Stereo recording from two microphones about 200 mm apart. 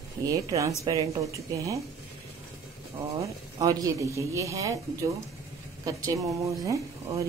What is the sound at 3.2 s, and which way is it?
A woman's voice, 15° right (ahead or behind).